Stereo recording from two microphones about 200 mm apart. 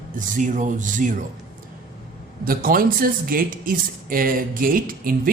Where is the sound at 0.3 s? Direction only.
40° right (ahead or behind).